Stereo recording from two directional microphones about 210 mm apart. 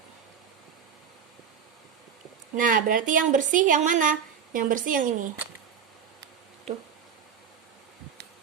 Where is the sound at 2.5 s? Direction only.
40° right (ahead or behind).